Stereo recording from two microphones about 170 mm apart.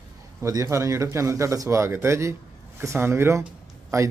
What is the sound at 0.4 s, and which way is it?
A man's voice, 20° right (ahead or behind).